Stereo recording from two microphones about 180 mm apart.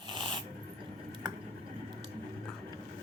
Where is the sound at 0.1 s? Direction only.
30° right (ahead or behind).